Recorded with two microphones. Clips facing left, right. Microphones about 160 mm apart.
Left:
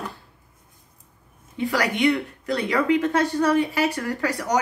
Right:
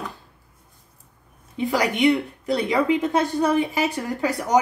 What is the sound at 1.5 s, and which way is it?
Speech, 20° right (ahead or behind).